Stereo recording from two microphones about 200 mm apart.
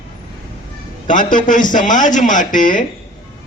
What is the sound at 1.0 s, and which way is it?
Speech, 40° left (ahead or behind).